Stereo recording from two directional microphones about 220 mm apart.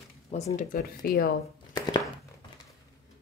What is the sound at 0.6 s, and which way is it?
Speech, 40° left (ahead or behind).